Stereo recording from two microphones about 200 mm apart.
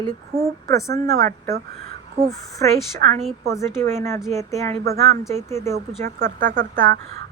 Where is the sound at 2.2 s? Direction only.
30° right (ahead or behind).